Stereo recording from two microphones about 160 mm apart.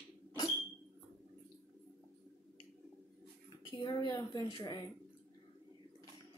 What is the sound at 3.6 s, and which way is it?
A woman's voice, 25° left (ahead or behind).